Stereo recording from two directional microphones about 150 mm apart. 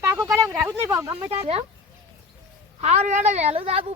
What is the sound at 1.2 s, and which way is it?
Speech, 40° right (ahead or behind).